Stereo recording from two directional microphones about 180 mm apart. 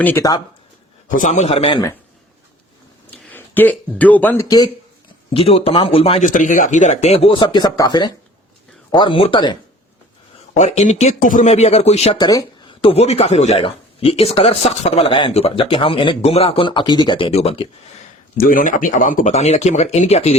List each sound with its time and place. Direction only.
0.0 s speech: 10° left (ahead or behind)
1.1 s speech: 40° left (ahead or behind)
3.1 s speech: 10° left (ahead or behind)
5.3 s speech: 30° left (ahead or behind)
10.5 s speech: 40° left (ahead or behind)
12.2 s speech: 20° left (ahead or behind)
18.3 s speech: 50° left (ahead or behind); by 20.3 s 35° left (ahead or behind)